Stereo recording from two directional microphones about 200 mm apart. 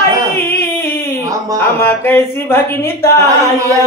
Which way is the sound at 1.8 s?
10° left (ahead or behind).